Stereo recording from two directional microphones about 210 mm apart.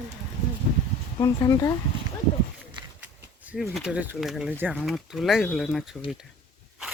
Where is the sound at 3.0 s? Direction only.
5° right (ahead or behind).